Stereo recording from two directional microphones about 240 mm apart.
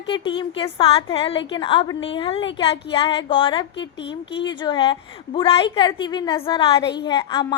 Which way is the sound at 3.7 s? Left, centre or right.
Left.